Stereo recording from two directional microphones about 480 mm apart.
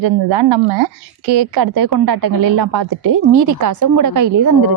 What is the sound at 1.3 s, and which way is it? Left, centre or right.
A woman's voice, right.